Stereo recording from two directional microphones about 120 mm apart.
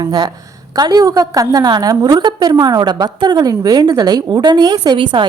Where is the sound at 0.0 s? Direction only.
35° right (ahead or behind).